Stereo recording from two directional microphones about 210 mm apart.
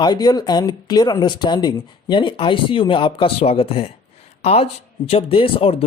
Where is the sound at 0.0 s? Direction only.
20° left (ahead or behind).